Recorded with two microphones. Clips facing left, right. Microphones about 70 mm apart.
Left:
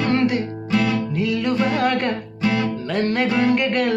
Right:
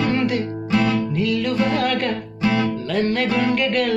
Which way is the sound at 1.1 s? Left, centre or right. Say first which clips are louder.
Even; left.